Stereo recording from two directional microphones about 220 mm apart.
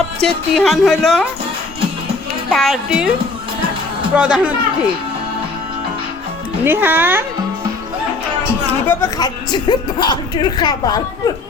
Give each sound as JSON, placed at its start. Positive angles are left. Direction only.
{"t": 0.2, "sound": "speech", "side_deg": 0}
{"t": 2.5, "sound": "speech", "side_deg": 0}
{"t": 4.1, "sound": "speech", "side_deg": -5}
{"t": 6.7, "sound": "speech", "side_deg": -10}
{"t": 8.9, "sound": "speech", "side_deg": 15}